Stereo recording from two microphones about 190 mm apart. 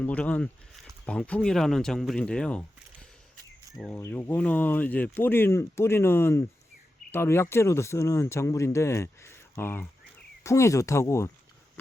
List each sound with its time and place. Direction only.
0.0 s speech: 5° left (ahead or behind)